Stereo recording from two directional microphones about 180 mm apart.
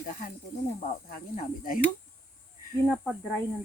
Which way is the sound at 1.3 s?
50° left (ahead or behind).